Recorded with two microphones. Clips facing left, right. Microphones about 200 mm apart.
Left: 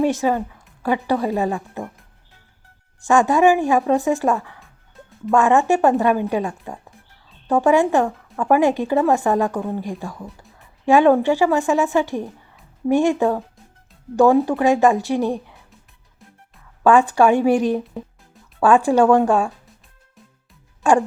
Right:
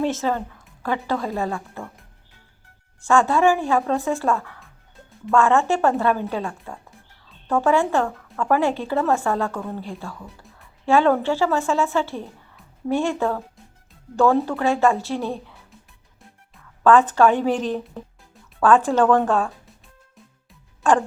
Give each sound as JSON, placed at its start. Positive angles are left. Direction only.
{"t": 0.0, "sound": "a woman's voice", "side_deg": 15}
{"t": 3.0, "sound": "speech", "side_deg": 15}
{"t": 14.4, "sound": "speech", "side_deg": 15}
{"t": 16.8, "sound": "speech", "side_deg": 15}
{"t": 20.8, "sound": "speech", "side_deg": 15}